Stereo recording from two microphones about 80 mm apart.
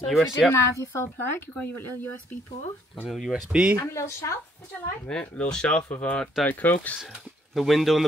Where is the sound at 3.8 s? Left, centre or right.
Left.